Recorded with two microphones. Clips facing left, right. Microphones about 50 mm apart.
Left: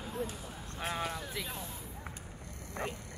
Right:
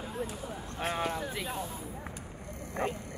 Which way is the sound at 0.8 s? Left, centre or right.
Centre.